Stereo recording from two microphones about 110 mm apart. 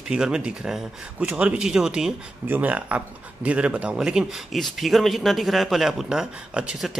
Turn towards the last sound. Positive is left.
turn(degrees=-10)  # may be behind; listen again after turning